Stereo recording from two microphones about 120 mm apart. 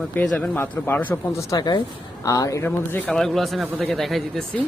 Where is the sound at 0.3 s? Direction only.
15° left (ahead or behind).